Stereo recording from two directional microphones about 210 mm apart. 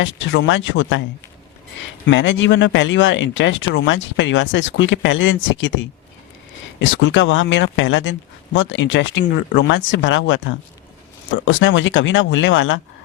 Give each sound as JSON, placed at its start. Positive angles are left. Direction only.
{"t": 0.0, "sound": "speech", "side_deg": 65}